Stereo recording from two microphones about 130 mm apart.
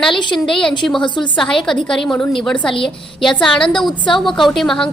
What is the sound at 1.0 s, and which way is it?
Speech, 35° left (ahead or behind).